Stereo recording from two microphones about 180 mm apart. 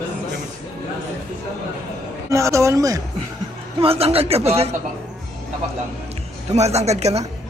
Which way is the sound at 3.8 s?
35° right (ahead or behind).